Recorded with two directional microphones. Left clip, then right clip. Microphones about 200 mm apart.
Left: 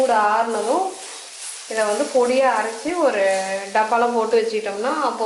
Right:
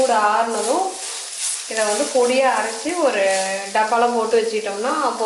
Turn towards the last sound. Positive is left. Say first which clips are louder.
# right 1 dB
turn(degrees=15)  # may be behind; listen again after turning